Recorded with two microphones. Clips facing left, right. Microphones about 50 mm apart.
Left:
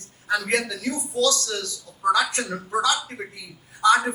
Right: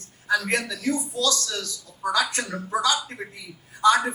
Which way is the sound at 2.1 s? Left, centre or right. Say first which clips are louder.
Left 1 dB; left.